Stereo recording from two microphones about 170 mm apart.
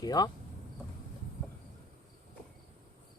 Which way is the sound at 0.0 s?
25° left (ahead or behind).